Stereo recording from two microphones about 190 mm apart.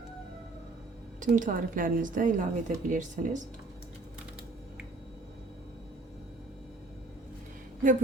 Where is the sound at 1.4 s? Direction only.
45° right (ahead or behind).